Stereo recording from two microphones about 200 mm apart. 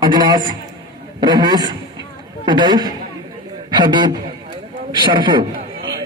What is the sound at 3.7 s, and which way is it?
Speech, 20° right (ahead or behind).